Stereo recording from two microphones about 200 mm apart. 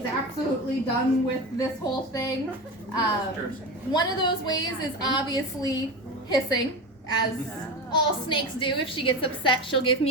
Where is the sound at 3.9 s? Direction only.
20° left (ahead or behind).